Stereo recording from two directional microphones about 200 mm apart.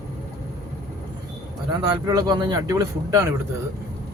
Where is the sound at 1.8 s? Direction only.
20° right (ahead or behind).